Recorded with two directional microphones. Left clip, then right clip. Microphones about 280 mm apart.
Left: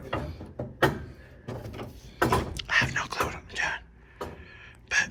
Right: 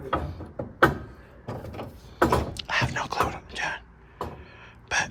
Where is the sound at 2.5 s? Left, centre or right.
Centre.